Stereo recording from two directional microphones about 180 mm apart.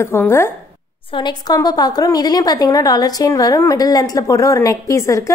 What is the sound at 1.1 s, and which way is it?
A woman's voice, 25° left (ahead or behind).